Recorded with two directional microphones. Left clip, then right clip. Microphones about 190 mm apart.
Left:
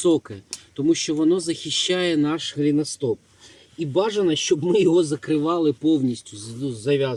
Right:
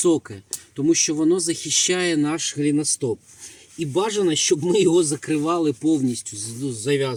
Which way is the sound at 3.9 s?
20° right (ahead or behind).